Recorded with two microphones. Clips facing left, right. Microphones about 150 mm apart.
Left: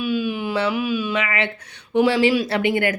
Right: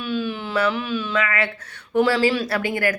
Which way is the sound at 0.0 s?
10° left (ahead or behind).